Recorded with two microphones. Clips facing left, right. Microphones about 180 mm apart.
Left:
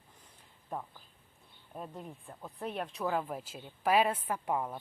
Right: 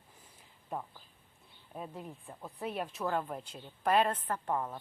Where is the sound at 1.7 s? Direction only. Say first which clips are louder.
Even; 5° right (ahead or behind).